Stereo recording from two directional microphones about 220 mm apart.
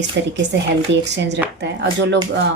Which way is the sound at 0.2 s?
50° right (ahead or behind).